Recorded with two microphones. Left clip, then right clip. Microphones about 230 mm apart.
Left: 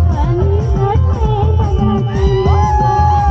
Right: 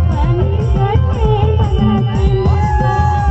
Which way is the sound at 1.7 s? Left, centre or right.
Right.